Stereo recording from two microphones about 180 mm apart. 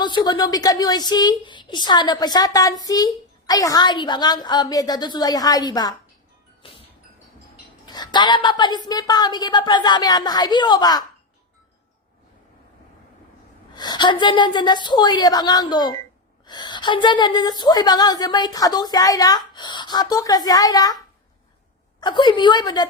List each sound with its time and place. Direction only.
0.0 s a woman's voice: 25° left (ahead or behind)
6.6 s music: 30° left (ahead or behind)
7.9 s a woman's voice: 25° left (ahead or behind)
13.7 s a woman's voice: 25° left (ahead or behind)
22.0 s a woman's voice: 25° left (ahead or behind)